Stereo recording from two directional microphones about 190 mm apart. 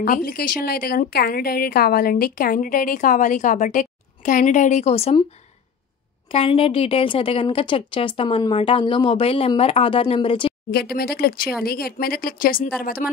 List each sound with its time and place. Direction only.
0.0 s a woman's voice: 45° left (ahead or behind); by 5.2 s 30° left (ahead or behind)
6.3 s a woman's voice: 30° left (ahead or behind)
10.7 s a woman's voice: 55° left (ahead or behind)